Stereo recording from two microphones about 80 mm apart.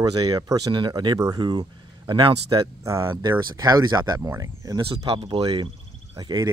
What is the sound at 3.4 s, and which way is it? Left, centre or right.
Speech, right.